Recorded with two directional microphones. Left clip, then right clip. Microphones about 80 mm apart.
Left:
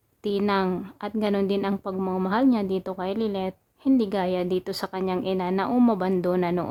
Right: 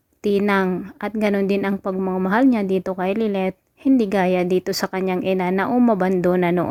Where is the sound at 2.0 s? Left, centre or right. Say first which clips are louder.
Right 4 dB; centre.